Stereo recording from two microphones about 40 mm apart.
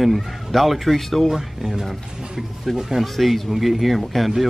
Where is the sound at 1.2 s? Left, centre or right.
Centre.